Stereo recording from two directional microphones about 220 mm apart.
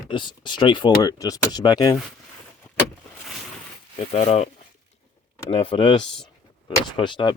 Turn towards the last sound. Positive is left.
turn(degrees=20)  # may be behind; listen again after turning